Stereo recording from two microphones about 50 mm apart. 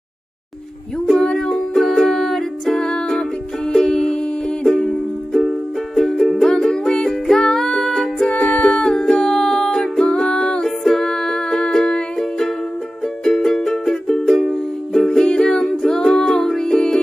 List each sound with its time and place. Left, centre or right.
1.1 s music: centre
2.8 s music: centre
8.3 s music: left
13.2 s music: centre